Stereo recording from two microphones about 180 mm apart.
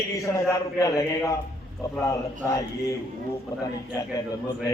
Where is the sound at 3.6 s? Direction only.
20° left (ahead or behind).